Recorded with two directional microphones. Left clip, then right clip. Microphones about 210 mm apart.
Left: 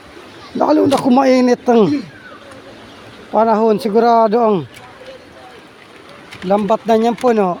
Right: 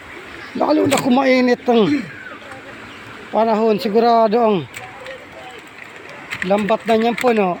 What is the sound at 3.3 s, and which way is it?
Speech, 20° left (ahead or behind).